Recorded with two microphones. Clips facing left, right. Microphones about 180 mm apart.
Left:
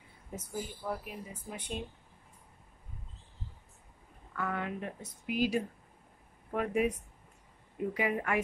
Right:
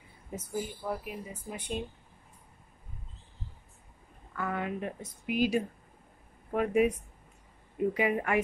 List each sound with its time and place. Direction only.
0.3 s speech: 10° right (ahead or behind)
4.4 s speech: 10° right (ahead or behind)
7.9 s a woman's voice: 20° right (ahead or behind)